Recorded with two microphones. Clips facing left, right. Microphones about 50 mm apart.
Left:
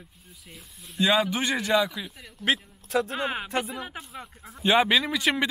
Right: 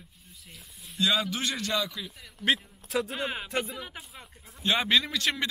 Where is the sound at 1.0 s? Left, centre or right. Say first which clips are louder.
Left 4 dB; centre.